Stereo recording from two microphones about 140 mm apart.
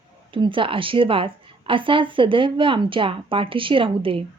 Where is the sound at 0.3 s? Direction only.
35° right (ahead or behind).